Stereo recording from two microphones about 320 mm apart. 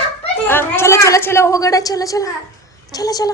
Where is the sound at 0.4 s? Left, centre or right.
Centre.